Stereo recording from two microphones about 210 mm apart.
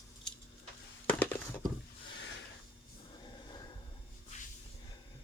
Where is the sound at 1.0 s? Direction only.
10° left (ahead or behind).